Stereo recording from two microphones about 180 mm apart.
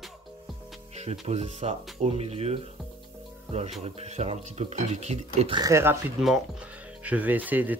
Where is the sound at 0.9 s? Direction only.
35° right (ahead or behind).